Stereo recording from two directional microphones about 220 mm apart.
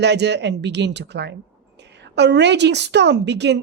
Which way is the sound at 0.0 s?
50° right (ahead or behind).